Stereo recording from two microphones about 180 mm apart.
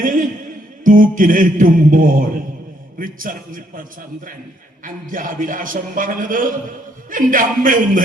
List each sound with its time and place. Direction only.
0.0 s music: 50° right (ahead or behind)
0.9 s a man's voice: 50° right (ahead or behind)
4.9 s a man's voice: 50° right (ahead or behind)